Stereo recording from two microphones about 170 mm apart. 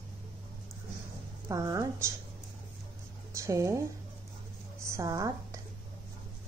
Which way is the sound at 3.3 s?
20° right (ahead or behind).